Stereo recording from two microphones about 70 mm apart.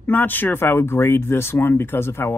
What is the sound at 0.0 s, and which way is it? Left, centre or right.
Speech, left.